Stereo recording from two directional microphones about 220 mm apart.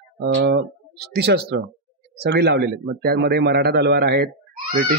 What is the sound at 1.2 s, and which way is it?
Speech, 50° right (ahead or behind).